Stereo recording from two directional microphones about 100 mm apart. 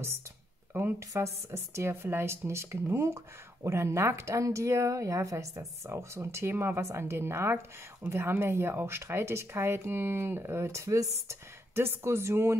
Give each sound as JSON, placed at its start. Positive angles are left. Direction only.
{"t": 0.7, "sound": "speech", "side_deg": -20}